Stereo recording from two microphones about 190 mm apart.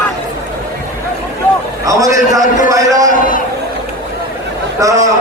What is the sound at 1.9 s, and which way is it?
A man's voice, 20° right (ahead or behind).